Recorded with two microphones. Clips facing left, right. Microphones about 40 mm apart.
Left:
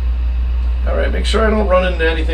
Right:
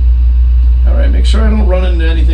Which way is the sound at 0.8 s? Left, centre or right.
Left.